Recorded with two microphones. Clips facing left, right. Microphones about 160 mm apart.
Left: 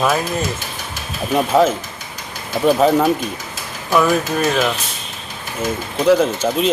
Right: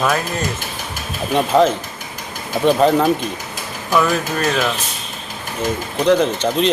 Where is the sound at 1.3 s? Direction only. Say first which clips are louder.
Even; 5° left (ahead or behind).